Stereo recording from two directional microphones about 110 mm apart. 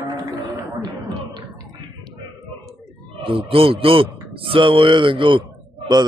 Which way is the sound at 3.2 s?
55° right (ahead or behind).